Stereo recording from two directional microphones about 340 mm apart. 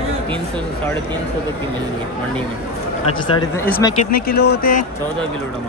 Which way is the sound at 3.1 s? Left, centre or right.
Centre.